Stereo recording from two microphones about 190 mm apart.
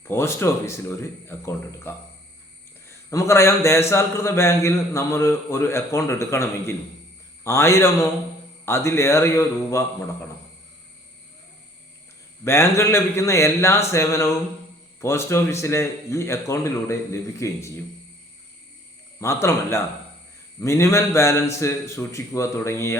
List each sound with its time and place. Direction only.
0.1 s a man's voice: 15° left (ahead or behind)
12.5 s a man's voice: 15° left (ahead or behind)
19.2 s a man's voice: 15° left (ahead or behind)